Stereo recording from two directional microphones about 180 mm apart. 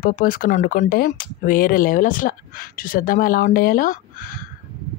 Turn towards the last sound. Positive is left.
turn(degrees=50)  # may be behind; listen again after turning